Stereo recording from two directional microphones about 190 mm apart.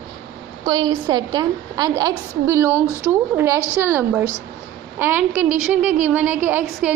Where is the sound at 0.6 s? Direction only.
20° right (ahead or behind).